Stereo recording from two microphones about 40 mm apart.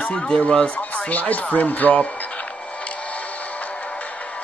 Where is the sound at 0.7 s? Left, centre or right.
Left.